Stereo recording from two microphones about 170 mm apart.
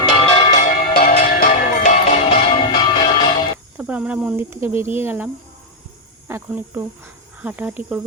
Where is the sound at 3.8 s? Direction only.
5° right (ahead or behind).